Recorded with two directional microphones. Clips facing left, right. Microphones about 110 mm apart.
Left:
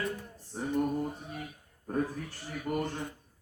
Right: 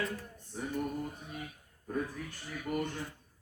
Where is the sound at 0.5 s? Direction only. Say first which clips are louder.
Left 3 dB; 40° left (ahead or behind).